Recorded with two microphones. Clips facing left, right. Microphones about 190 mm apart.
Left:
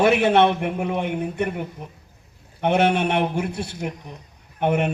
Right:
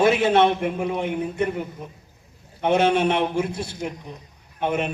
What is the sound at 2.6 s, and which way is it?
A man's voice, 60° left (ahead or behind).